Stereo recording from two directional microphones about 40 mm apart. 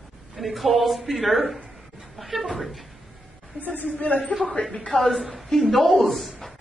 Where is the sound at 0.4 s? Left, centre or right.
Centre.